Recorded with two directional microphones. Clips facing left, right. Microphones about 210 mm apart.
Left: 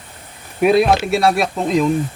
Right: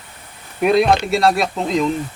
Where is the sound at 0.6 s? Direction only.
5° left (ahead or behind).